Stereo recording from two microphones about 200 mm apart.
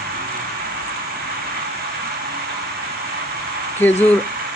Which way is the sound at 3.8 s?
10° left (ahead or behind).